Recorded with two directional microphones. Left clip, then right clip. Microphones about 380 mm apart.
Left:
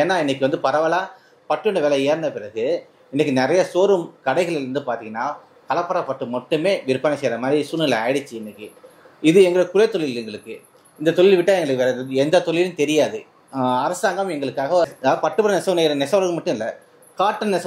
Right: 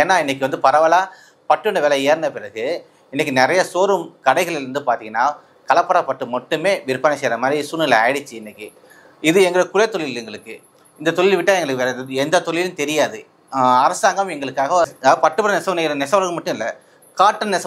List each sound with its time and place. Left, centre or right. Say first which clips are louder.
0.0 s a woman's voice: right 3 dB; right